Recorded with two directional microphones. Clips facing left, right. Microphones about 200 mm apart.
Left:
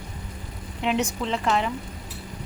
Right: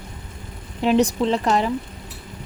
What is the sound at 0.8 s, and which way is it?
Speech, 35° right (ahead or behind).